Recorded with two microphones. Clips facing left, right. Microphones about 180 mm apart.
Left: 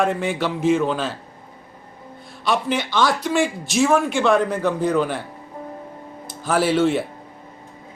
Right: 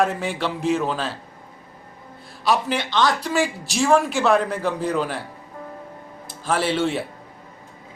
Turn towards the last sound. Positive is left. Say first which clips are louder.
# left 4 dB
turn(degrees=0)  # may be behind; listen again after turning